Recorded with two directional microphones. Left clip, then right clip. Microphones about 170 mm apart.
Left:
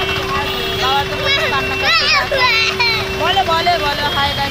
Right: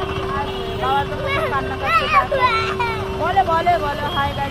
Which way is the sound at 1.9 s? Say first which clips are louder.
Left 1 dB; 30° left (ahead or behind).